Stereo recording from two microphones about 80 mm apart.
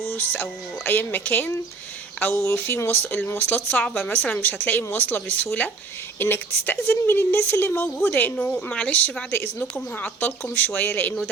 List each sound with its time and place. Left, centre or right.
0.1 s speech: left
2.3 s speech: left